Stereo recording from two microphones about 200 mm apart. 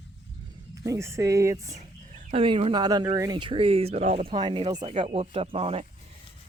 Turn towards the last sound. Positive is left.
turn(degrees=-30)  # may be behind; listen again after turning